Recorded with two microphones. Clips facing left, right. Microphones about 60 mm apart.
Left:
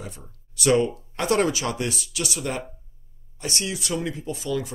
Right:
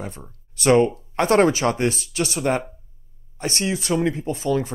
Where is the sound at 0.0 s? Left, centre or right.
Right.